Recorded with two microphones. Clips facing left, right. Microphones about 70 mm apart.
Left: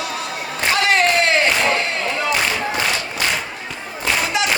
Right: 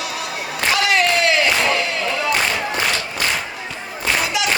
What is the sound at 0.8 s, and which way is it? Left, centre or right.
Crowd, left.